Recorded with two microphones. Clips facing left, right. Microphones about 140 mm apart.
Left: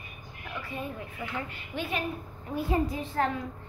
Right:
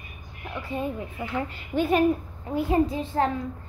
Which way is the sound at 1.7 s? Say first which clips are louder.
Right 10 dB; 45° right (ahead or behind).